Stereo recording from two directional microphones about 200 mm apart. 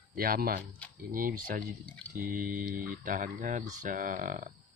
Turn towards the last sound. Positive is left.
turn(degrees=-40)  # may be behind; listen again after turning